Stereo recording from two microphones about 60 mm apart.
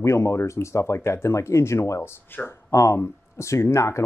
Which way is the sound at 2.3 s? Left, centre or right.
Left.